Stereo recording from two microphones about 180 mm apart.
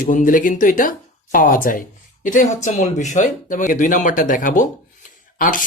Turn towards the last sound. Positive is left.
turn(degrees=50)  # may be behind; listen again after turning